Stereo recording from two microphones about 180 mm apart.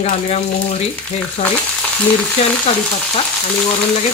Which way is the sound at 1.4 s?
45° left (ahead or behind).